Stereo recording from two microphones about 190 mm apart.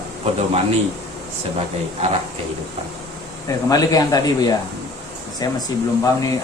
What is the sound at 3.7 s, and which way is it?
Speech, 20° left (ahead or behind).